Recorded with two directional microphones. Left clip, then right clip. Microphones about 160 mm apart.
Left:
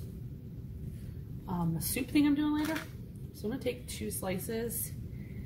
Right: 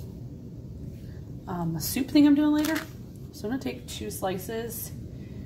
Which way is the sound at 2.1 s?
45° right (ahead or behind).